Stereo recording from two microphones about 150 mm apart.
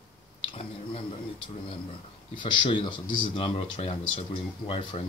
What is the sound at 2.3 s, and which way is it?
Speech, 30° left (ahead or behind).